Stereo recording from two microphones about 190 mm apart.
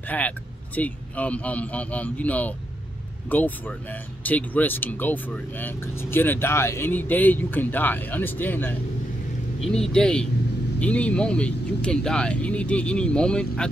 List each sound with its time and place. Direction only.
0.1 s speech: 10° left (ahead or behind)